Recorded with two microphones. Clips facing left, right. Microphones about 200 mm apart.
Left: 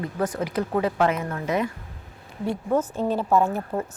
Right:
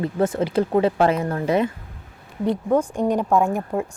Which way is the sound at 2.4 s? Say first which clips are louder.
Right 4 dB; 15° right (ahead or behind).